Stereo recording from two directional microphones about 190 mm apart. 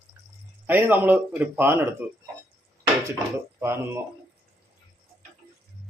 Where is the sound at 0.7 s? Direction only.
10° right (ahead or behind).